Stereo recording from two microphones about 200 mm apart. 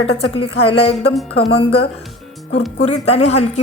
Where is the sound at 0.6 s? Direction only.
30° left (ahead or behind).